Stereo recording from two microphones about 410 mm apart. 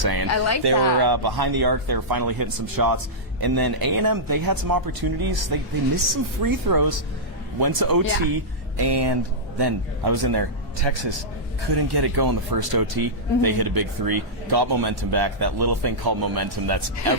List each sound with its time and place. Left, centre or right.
0.0 s speech: right
0.3 s speech: left
0.6 s speech: right
8.8 s speech: right
9.6 s speech: right
10.8 s a man's voice: right
11.7 s speech: right